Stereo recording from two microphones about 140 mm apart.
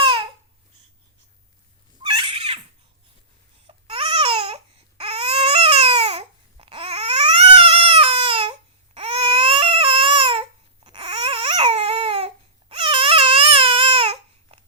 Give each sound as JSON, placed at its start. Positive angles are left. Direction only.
{"t": 2.0, "sound": "cat", "side_deg": -35}
{"t": 3.7, "sound": "baby cry", "side_deg": -40}
{"t": 10.8, "sound": "babbling", "side_deg": -35}